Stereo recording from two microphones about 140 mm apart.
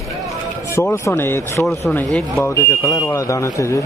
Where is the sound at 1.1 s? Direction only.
15° left (ahead or behind).